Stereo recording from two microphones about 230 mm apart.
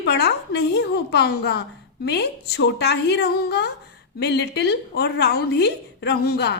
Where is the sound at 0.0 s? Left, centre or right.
Left.